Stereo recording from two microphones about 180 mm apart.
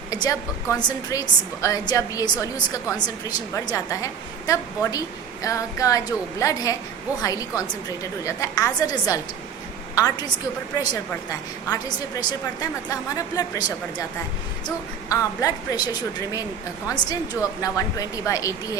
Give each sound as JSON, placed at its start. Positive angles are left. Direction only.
{"t": 0.1, "sound": "a woman's voice", "side_deg": 20}
{"t": 12.9, "sound": "a woman's voice", "side_deg": 20}
{"t": 15.1, "sound": "a woman's voice", "side_deg": 20}